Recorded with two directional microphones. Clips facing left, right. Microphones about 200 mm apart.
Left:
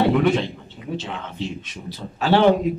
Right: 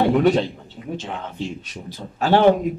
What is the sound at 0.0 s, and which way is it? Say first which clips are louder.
A man's voice: right 1 dB; 40° right (ahead or behind).